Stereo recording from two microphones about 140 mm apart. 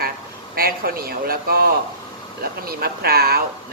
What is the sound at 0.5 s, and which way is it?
Speech, 90° right.